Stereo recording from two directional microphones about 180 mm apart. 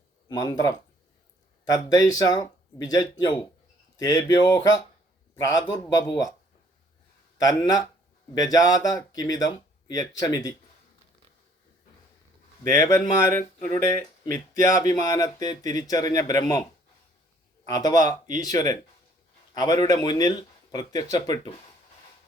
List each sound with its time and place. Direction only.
0.3 s speech: 20° left (ahead or behind)
7.3 s speech: 20° left (ahead or behind)
12.6 s speech: 20° left (ahead or behind)
14.3 s speech: 50° right (ahead or behind)
14.6 s speech: 15° left (ahead or behind)
17.7 s speech: 20° left (ahead or behind)